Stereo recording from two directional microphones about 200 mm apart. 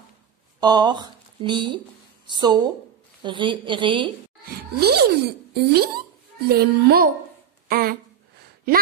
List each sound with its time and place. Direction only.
0.6 s a woman's voice: 20° right (ahead or behind)
4.7 s speech: 55° right (ahead or behind)